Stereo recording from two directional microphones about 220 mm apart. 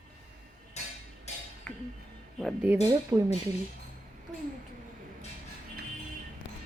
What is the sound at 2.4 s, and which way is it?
Speech, 5° right (ahead or behind).